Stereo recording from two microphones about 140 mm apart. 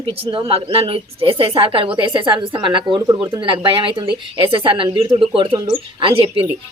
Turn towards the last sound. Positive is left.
turn(degrees=-40)  # may be behind; listen again after turning